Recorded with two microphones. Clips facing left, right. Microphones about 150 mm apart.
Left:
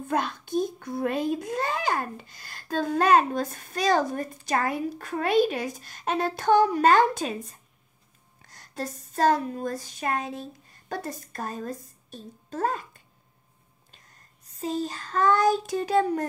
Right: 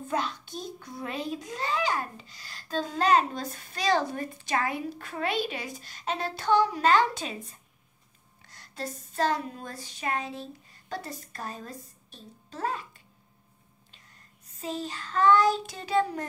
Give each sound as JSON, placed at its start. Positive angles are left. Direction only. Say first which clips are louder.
{"t": 0.1, "sound": "a child's voice", "louder": "left 5 dB", "side_deg": 50}
{"t": 8.5, "sound": "speech", "louder": "left 3 dB", "side_deg": 45}
{"t": 14.6, "sound": "a child's voice", "louder": "left 5 dB", "side_deg": 40}